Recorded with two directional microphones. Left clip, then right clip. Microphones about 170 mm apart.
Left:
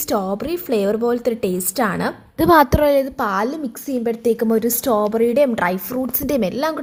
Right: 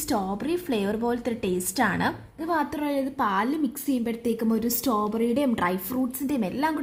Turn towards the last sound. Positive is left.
turn(degrees=25)  # may be behind; listen again after turning